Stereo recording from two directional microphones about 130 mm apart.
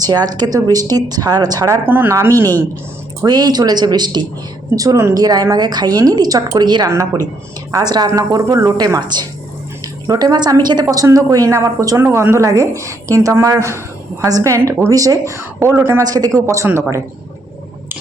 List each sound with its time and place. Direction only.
0.0 s a woman's voice: 30° right (ahead or behind)
16.0 s a woman's voice: 30° right (ahead or behind)